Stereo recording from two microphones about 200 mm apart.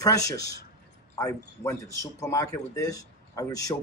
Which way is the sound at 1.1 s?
15° left (ahead or behind).